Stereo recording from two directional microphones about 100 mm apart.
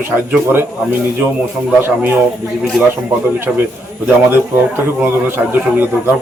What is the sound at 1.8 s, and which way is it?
Speech, 20° right (ahead or behind).